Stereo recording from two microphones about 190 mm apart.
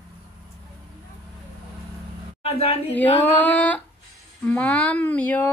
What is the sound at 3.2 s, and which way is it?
Speech, 10° left (ahead or behind).